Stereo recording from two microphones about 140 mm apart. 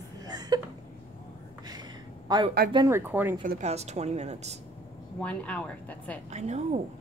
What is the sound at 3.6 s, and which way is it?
Speech, 50° right (ahead or behind).